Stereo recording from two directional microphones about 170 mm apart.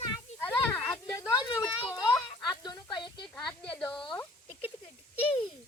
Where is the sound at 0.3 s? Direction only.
10° left (ahead or behind).